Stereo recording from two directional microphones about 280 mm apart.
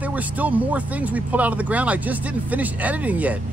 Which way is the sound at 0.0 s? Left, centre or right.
Centre.